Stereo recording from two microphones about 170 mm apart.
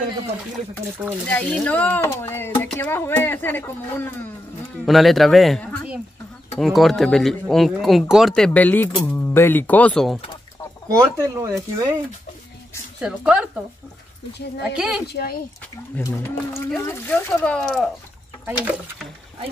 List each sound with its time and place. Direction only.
1.2 s speech: 5° left (ahead or behind)
4.8 s speech: centre (ahead or behind)
8.5 s speech: 10° left (ahead or behind)
10.9 s speech: 20° right (ahead or behind)
13.0 s speech: 5° right (ahead or behind)
14.6 s speech: 5° right (ahead or behind)
15.1 s speech: 65° left (ahead or behind)
16.0 s speech: 15° left (ahead or behind); by 19.0 s 5° right (ahead or behind)